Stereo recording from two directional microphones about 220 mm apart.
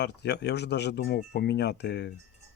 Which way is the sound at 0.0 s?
50° left (ahead or behind).